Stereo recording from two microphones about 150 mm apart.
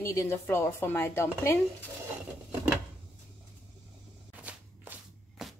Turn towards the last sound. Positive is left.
turn(degrees=-5)  # may be behind; listen again after turning